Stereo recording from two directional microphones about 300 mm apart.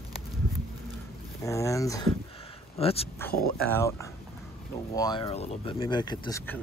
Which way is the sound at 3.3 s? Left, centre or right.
Left.